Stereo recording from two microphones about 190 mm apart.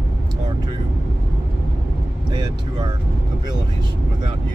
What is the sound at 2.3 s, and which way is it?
Speech, 20° right (ahead or behind).